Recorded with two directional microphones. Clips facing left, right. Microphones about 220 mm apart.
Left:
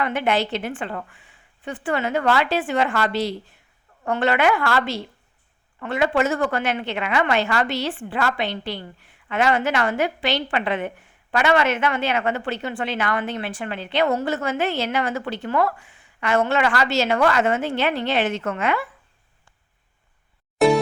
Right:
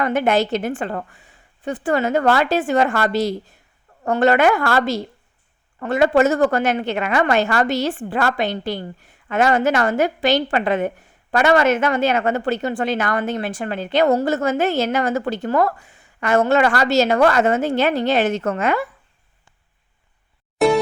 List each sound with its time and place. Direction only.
0.0 s a woman's voice: 45° right (ahead or behind)
20.6 s music: centre (ahead or behind)